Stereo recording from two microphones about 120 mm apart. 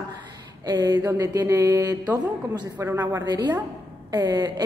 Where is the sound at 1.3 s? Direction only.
25° right (ahead or behind).